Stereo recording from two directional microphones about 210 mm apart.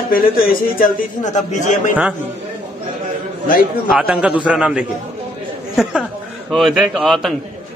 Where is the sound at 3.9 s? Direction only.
5° right (ahead or behind).